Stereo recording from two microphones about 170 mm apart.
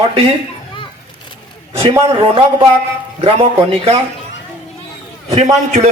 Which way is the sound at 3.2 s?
35° right (ahead or behind).